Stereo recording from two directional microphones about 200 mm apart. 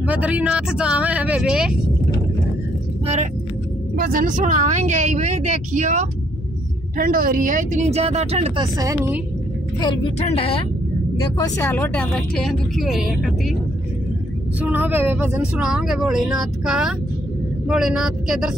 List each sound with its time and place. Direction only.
0.0 s speech: 5° right (ahead or behind)
3.9 s speech: 45° right (ahead or behind); by 8.6 s 30° right (ahead or behind)
8.7 s speech: 15° right (ahead or behind)
10.1 s speech: 30° left (ahead or behind)
11.4 s speech: 15° left (ahead or behind); by 13.3 s centre (ahead or behind)
14.6 s speech: 10° right (ahead or behind)